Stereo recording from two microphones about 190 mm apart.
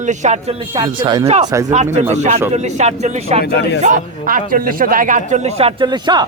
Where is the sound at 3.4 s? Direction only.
65° left (ahead or behind).